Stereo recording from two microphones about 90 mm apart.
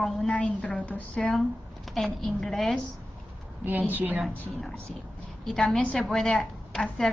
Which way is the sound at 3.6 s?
20° right (ahead or behind).